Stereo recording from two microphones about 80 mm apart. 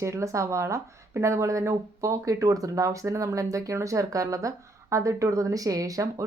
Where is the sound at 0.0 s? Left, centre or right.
Right.